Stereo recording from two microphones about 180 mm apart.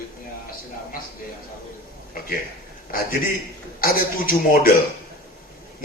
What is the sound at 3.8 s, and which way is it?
Speech, 50° left (ahead or behind).